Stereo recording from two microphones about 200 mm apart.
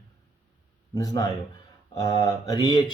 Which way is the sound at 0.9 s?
15° left (ahead or behind).